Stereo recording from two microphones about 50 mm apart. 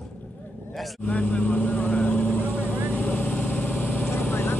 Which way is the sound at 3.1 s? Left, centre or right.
Left.